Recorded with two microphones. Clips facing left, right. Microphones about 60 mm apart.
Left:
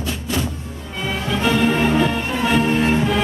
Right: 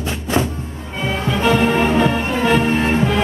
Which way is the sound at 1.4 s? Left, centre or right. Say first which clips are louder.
Right 2 dB; centre.